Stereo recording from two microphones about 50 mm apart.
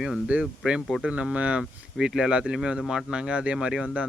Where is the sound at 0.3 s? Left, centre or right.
Right.